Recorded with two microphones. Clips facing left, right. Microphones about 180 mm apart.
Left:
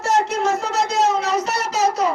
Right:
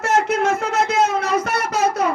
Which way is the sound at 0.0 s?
55° right (ahead or behind).